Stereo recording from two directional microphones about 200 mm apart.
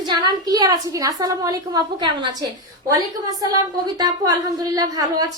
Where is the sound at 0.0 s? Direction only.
20° right (ahead or behind).